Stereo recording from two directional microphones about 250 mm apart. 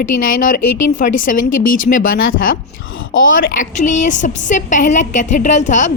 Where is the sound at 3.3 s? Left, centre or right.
Left.